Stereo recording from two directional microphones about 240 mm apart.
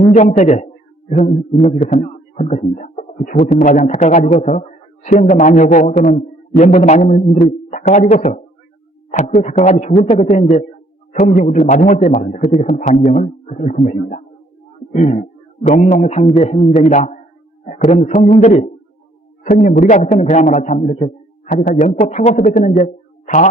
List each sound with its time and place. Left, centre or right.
0.0 s a man's voice: left